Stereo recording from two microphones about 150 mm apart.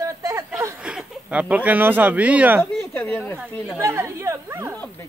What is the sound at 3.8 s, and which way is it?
Speech, 20° right (ahead or behind).